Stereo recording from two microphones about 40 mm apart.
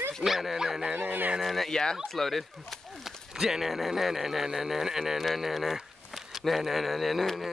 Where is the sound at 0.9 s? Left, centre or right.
Right.